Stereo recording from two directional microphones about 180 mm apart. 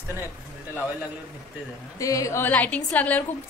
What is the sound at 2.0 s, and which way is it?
A woman's voice, 20° left (ahead or behind).